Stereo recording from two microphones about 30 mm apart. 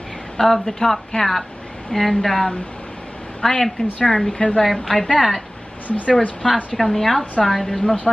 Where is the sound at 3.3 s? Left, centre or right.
Left.